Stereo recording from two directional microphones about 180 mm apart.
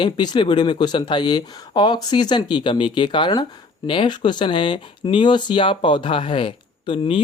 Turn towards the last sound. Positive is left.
turn(degrees=30)  # may be behind; listen again after turning